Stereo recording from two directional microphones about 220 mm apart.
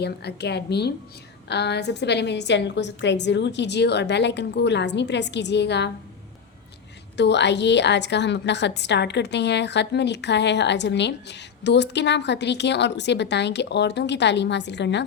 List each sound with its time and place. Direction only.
0.0 s a woman's voice: 50° left (ahead or behind)
7.2 s a woman's voice: 50° left (ahead or behind)